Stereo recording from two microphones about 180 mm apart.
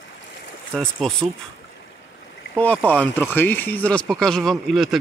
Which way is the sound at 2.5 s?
10° left (ahead or behind).